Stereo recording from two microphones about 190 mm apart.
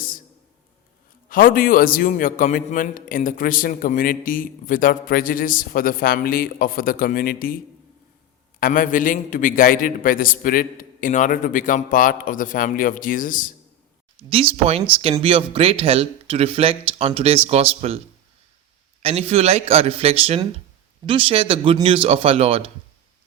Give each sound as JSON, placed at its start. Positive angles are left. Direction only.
{"t": 1.3, "sound": "a man's voice", "side_deg": 45}
{"t": 8.6, "sound": "a man's voice", "side_deg": 45}
{"t": 14.3, "sound": "speech", "side_deg": -30}
{"t": 19.0, "sound": "speech", "side_deg": -30}